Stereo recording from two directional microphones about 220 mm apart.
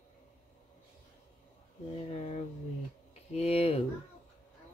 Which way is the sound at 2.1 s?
30° left (ahead or behind).